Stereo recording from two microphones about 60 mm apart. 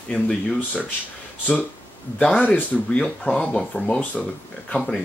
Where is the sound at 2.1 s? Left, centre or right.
Left.